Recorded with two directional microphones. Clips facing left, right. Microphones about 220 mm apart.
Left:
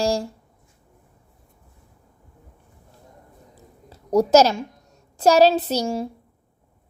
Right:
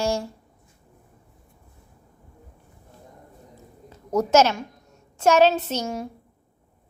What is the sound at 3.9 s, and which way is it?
A woman's voice, 35° left (ahead or behind).